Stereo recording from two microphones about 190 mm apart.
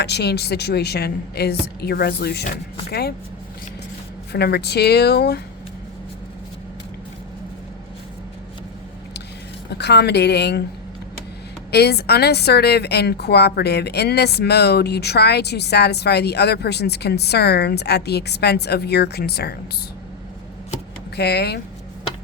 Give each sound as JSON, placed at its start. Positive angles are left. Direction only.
{"t": 0.0, "sound": "a woman's voice", "side_deg": 60}
{"t": 4.3, "sound": "a woman's voice", "side_deg": 60}
{"t": 9.6, "sound": "a woman's voice", "side_deg": 60}
{"t": 11.7, "sound": "a woman's voice", "side_deg": 60}
{"t": 21.2, "sound": "a woman's voice", "side_deg": 60}